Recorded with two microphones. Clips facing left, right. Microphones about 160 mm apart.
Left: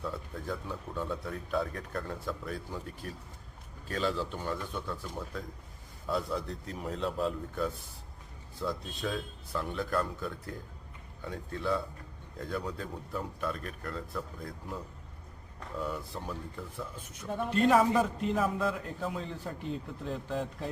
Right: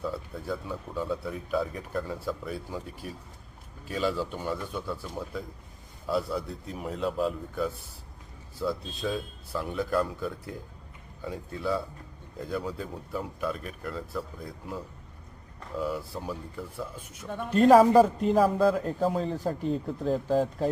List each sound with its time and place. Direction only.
0.0 s a man's voice: 5° right (ahead or behind)
15.8 s a man's voice: 5° right (ahead or behind)
17.5 s a man's voice: 40° right (ahead or behind)